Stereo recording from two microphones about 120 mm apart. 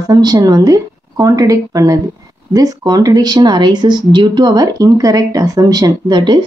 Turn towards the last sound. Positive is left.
turn(degrees=-35)  # may be behind; listen again after turning